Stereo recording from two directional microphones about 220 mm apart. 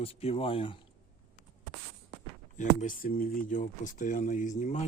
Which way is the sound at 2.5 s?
35° left (ahead or behind).